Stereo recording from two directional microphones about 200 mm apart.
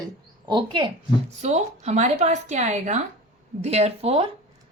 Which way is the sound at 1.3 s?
35° right (ahead or behind).